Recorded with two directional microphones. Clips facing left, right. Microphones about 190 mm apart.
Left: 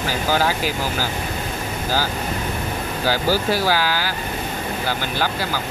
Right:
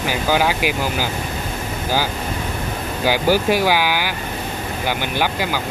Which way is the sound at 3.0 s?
15° right (ahead or behind).